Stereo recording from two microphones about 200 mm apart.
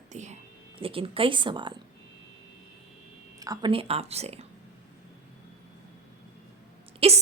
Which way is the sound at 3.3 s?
20° right (ahead or behind).